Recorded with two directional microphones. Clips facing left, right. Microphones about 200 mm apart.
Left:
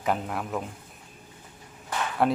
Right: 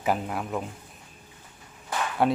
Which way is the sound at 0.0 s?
5° right (ahead or behind).